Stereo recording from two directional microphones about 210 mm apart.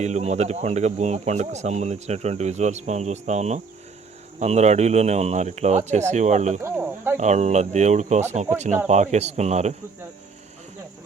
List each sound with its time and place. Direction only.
0.0 s speech: 30° right (ahead or behind)
6.6 s speech: 10° right (ahead or behind)
7.2 s speech: 35° right (ahead or behind)